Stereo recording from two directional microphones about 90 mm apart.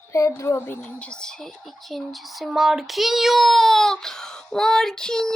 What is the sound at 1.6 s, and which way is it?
Child singing, centre (ahead or behind).